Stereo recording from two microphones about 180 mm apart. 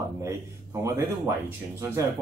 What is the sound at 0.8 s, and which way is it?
Speech, 15° right (ahead or behind).